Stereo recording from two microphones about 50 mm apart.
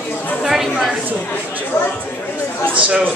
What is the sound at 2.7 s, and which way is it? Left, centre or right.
Speech, right.